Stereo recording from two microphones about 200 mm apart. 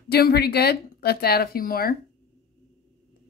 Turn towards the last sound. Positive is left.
turn(degrees=50)  # may be behind; listen again after turning